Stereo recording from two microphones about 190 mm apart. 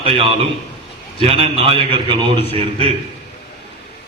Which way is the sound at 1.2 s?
30° right (ahead or behind).